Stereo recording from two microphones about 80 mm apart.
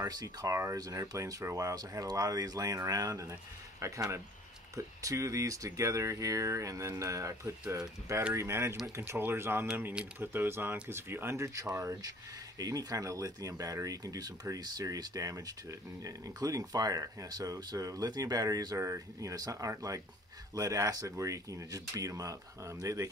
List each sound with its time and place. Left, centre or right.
0.5 s speech: right
18.8 s speech: right
19.3 s speech: right